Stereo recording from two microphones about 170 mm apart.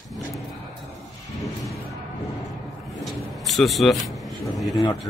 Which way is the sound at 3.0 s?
Centre (ahead or behind).